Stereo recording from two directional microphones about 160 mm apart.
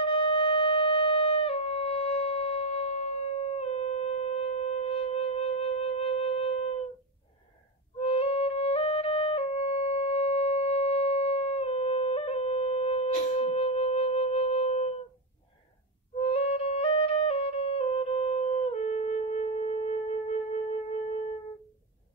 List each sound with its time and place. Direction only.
0.0 s wind instrument: 35° left (ahead or behind)
8.0 s music: 35° left (ahead or behind)
16.2 s music: 40° left (ahead or behind)